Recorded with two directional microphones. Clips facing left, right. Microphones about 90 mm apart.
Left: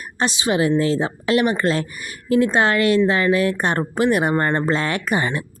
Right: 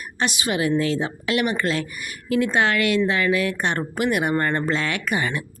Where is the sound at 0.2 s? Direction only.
30° left (ahead or behind).